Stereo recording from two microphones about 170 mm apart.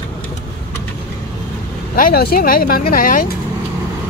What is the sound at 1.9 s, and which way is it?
Speech, 60° left (ahead or behind).